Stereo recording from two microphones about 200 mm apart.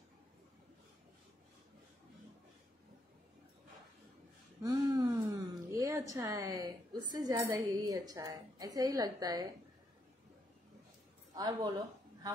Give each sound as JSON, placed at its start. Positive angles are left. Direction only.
{"t": 4.6, "sound": "a woman's voice", "side_deg": -20}
{"t": 11.3, "sound": "a woman's voice", "side_deg": -20}